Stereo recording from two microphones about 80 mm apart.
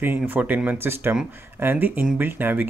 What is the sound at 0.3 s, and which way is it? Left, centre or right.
Speech, right.